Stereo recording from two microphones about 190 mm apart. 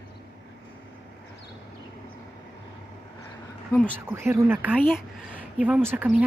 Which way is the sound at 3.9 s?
15° right (ahead or behind).